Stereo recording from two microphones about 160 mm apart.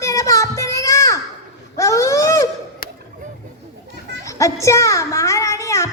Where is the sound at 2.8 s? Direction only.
65° left (ahead or behind).